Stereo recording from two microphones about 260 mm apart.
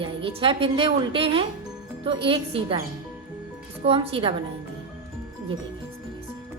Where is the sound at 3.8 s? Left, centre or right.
Right.